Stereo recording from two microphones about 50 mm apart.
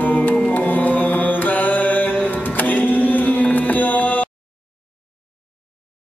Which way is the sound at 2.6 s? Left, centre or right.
Left.